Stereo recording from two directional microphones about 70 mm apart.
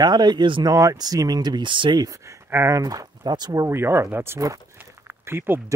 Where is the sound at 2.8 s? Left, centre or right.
Right.